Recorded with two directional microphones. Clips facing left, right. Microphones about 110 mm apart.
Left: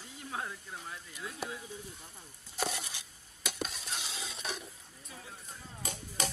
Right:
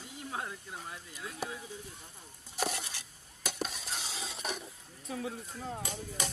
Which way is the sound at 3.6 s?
5° right (ahead or behind).